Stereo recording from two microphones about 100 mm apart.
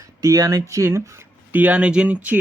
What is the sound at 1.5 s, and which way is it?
Speech, 15° right (ahead or behind).